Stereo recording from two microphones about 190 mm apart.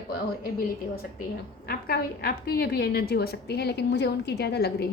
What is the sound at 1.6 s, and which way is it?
A woman's voice, 55° left (ahead or behind).